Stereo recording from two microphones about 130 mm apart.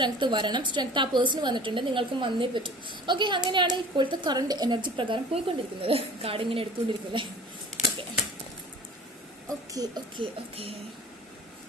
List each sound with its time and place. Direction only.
0.0 s a woman's voice: 35° right (ahead or behind)
9.8 s a woman's voice: 35° right (ahead or behind)